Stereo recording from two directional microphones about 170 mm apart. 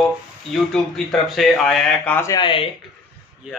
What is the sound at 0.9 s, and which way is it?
Speech, centre (ahead or behind).